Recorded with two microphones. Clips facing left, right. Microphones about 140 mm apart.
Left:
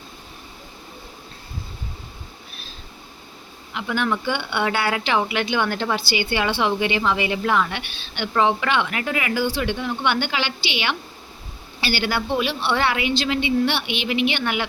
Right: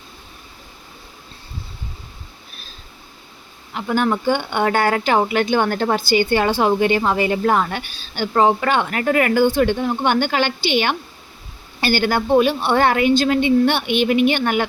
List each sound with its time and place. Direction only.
3.8 s speech: 40° right (ahead or behind)